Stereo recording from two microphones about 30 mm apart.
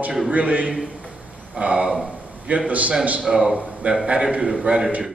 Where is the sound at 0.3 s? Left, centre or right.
Right.